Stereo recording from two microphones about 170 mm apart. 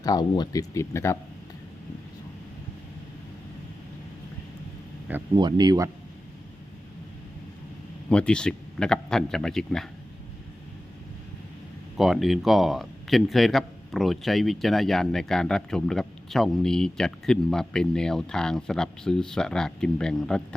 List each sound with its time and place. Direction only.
0.0 s speech: 25° left (ahead or behind)
5.3 s speech: 25° right (ahead or behind)
8.1 s speech: 5° left (ahead or behind)
11.9 s speech: centre (ahead or behind)